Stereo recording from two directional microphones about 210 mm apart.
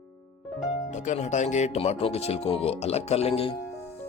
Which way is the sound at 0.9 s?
35° left (ahead or behind).